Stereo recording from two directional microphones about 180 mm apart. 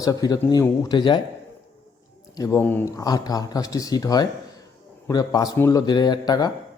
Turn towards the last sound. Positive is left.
turn(degrees=20)  # may be behind; listen again after turning